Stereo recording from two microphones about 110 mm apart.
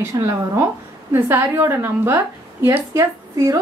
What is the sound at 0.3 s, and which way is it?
A woman's voice, 25° right (ahead or behind).